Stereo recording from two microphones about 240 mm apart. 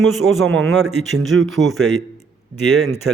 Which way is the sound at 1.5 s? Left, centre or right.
Centre.